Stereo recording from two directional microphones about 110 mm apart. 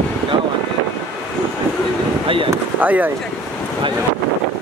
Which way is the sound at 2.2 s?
50° right (ahead or behind).